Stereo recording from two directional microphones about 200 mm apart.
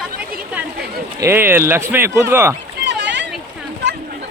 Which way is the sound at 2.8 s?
60° right (ahead or behind).